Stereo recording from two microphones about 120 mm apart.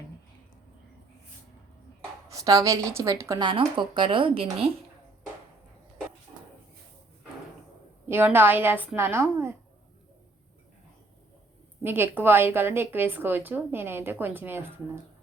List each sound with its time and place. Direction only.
2.3 s a woman's voice: 30° right (ahead or behind)
3.4 s speech: 45° right (ahead or behind)
8.0 s a woman's voice: 15° right (ahead or behind)
11.8 s a woman's voice: 15° right (ahead or behind)